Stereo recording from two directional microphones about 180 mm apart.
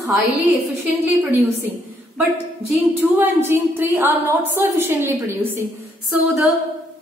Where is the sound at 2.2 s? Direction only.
10° right (ahead or behind).